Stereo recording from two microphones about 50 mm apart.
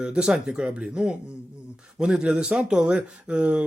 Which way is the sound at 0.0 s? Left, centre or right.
Centre.